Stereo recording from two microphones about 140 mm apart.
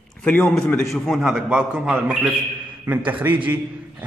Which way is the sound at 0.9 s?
Centre (ahead or behind).